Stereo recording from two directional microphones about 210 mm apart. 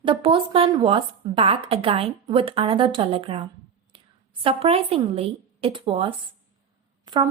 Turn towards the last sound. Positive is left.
turn(degrees=-20)  # may be behind; listen again after turning